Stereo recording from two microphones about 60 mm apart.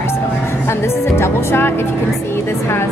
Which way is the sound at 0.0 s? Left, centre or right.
Left.